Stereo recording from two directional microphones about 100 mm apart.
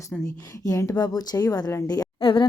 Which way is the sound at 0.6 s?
35° left (ahead or behind).